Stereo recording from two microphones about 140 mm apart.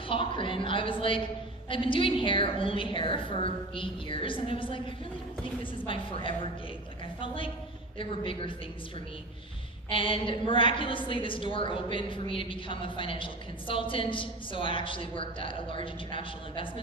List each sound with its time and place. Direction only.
0.1 s a woman's voice: 40° left (ahead or behind)
9.9 s a woman's voice: 40° left (ahead or behind)